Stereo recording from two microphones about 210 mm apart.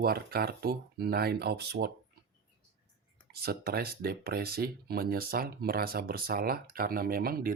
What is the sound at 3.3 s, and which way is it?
Speech, 45° right (ahead or behind).